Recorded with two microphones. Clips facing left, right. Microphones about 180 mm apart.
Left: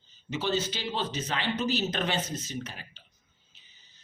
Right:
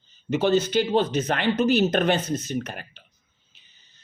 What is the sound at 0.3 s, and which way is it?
Speech, 55° right (ahead or behind).